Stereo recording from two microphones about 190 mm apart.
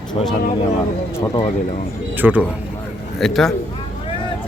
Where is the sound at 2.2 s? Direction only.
10° right (ahead or behind).